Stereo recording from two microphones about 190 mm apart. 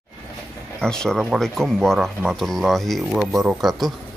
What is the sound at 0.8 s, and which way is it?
Speech, 5° left (ahead or behind).